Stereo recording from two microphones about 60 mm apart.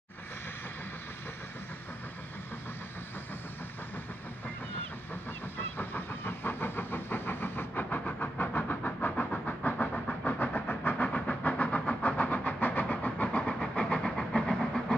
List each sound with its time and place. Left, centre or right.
5.6 s vehicle: left
11.1 s train: centre
11.8 s vehicle: left